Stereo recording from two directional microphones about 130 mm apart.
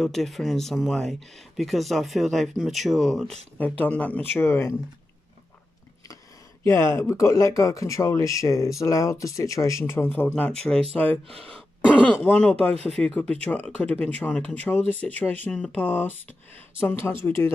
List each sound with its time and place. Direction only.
0.0 s speech: centre (ahead or behind)
3.5 s speech: 10° left (ahead or behind)
6.6 s speech: 20° left (ahead or behind)